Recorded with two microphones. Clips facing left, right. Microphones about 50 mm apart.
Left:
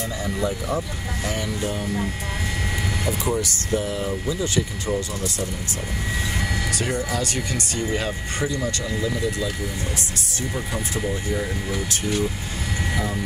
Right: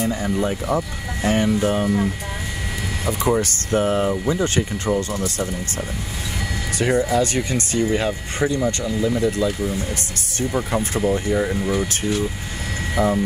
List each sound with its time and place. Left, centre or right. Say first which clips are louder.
0.0 s speech: right 4 dB; right
3.1 s speech: right 7 dB; right
6.8 s speech: right 11 dB; right
11.3 s speech: right 6 dB; right